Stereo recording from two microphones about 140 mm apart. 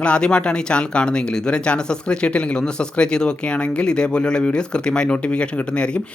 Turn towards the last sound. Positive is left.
turn(degrees=5)  # may be behind; listen again after turning